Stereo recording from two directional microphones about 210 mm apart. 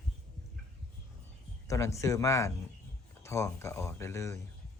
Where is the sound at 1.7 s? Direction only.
15° left (ahead or behind).